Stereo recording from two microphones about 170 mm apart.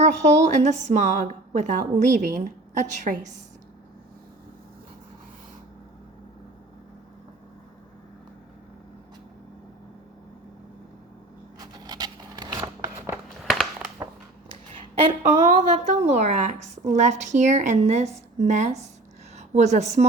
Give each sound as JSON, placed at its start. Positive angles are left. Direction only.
{"t": 0.0, "sound": "a woman's voice", "side_deg": -45}
{"t": 11.6, "sound": "zipper", "side_deg": -25}
{"t": 13.4, "sound": "a sound", "side_deg": 0}
{"t": 15.2, "sound": "a woman's voice", "side_deg": -40}